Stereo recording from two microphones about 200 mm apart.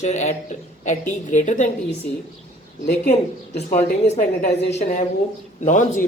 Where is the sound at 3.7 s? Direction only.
35° left (ahead or behind).